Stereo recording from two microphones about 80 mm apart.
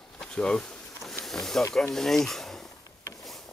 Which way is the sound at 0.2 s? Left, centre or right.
Centre.